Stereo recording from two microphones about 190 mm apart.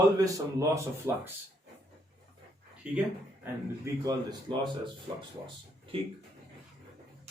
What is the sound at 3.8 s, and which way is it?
Speech, 20° right (ahead or behind).